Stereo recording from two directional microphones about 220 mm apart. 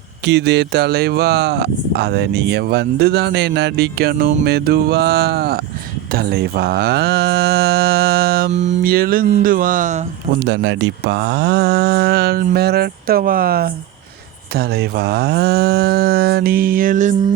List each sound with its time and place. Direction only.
0.3 s speech: 50° right (ahead or behind)
10.4 s speech: 50° right (ahead or behind); by 17.2 s 35° right (ahead or behind)